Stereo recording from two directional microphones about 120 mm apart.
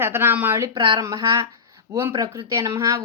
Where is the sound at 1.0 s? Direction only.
30° right (ahead or behind).